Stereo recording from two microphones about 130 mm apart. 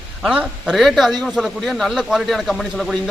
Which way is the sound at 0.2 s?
5° right (ahead or behind).